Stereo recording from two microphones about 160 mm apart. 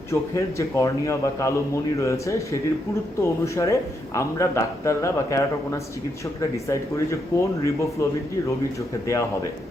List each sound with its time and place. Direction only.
0.1 s a man's voice: 20° left (ahead or behind)
9.0 s a man's voice: 20° left (ahead or behind)